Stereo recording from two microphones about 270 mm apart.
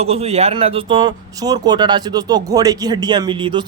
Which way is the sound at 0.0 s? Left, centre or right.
Right.